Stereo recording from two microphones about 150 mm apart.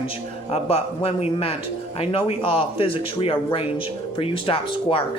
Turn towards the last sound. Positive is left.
turn(degrees=35)  # may be behind; listen again after turning